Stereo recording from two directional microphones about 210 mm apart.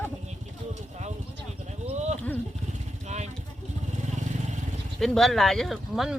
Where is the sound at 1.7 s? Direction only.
30° right (ahead or behind).